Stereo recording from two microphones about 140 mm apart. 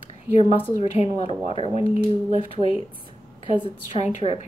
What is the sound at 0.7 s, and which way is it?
Speech, 50° left (ahead or behind).